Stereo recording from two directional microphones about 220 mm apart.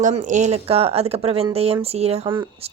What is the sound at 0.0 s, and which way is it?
Speech, 35° right (ahead or behind).